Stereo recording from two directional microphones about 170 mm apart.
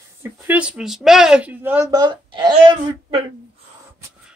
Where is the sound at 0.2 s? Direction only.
10° right (ahead or behind); by 3.3 s 30° right (ahead or behind).